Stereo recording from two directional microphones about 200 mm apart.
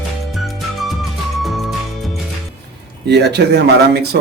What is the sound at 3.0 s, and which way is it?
Speech, 55° right (ahead or behind).